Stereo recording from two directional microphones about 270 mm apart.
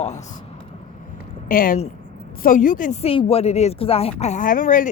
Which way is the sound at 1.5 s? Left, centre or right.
Left.